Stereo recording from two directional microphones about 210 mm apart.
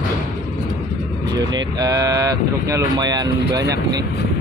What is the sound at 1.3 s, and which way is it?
Speech, 20° right (ahead or behind).